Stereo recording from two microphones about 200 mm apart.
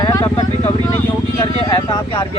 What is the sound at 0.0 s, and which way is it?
Vehicle, 20° left (ahead or behind).